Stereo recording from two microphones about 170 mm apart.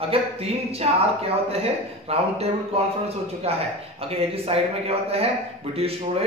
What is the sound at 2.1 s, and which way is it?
A man's voice, 35° right (ahead or behind).